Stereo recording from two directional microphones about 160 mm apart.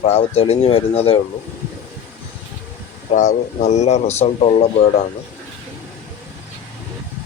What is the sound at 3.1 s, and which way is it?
Speech, 50° left (ahead or behind).